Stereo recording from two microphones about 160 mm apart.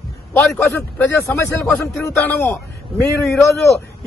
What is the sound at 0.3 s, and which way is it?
A man's voice, 10° left (ahead or behind).